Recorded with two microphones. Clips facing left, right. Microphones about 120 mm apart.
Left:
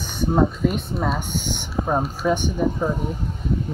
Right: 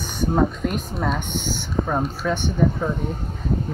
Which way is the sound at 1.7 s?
15° left (ahead or behind).